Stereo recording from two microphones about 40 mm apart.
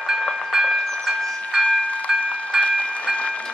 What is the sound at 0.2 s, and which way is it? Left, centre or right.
Train, centre.